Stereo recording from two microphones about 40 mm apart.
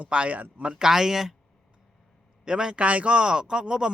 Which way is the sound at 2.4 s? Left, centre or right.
Right.